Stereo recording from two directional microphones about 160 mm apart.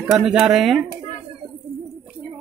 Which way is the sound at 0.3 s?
Centre (ahead or behind).